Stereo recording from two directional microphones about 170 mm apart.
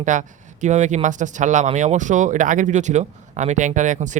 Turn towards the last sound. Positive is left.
turn(degrees=-45)  # may be behind; listen again after turning